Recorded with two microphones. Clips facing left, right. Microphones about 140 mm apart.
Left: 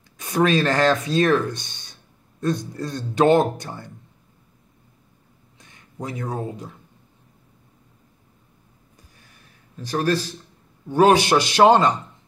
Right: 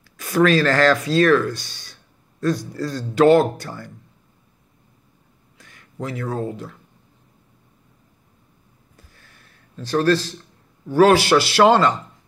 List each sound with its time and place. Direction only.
0.2 s speech: 20° left (ahead or behind)
5.6 s speech: 20° left (ahead or behind)
8.9 s a sound: 15° left (ahead or behind)
10.9 s a man's voice: 20° left (ahead or behind)